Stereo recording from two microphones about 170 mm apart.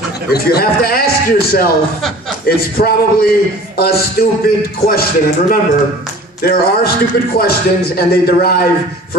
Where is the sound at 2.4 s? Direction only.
60° left (ahead or behind).